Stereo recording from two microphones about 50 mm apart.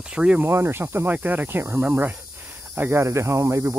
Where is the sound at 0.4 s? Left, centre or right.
Right.